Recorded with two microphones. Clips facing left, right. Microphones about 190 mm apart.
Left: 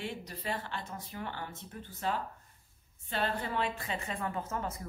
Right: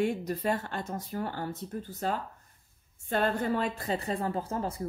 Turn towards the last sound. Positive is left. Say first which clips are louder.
# right 4 dB
turn(degrees=-35)  # may be behind; listen again after turning